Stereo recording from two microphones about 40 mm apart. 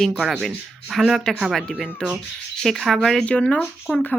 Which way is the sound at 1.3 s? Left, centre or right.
Centre.